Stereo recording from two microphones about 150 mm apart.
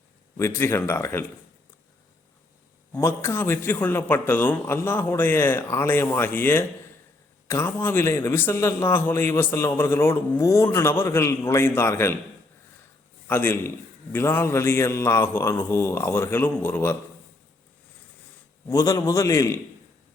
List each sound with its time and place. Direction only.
0.3 s a man's voice: 15° left (ahead or behind)
2.9 s a man's voice: 15° left (ahead or behind)
13.2 s a man's voice: 15° left (ahead or behind)
18.7 s a man's voice: 25° left (ahead or behind)